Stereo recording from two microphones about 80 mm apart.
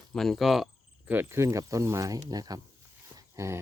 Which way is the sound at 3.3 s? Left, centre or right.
Right.